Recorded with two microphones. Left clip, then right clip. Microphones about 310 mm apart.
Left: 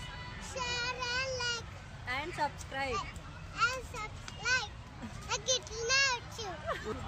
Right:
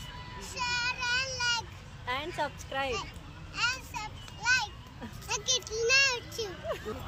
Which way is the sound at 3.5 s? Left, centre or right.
Centre.